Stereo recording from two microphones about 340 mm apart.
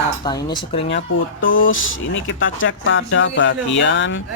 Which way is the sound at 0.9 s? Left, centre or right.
Left.